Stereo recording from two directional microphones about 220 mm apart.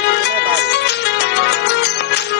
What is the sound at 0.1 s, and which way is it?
Music, 50° left (ahead or behind).